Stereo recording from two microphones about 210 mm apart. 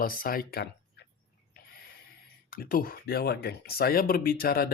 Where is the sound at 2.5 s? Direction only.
45° left (ahead or behind).